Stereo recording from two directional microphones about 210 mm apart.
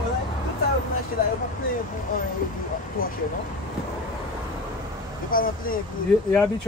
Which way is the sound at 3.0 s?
45° left (ahead or behind).